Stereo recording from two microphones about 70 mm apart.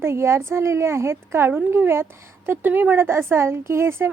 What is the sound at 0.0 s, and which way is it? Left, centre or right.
A woman's voice, right.